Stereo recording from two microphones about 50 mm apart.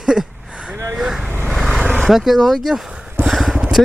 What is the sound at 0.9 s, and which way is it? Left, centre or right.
Vehicle, centre.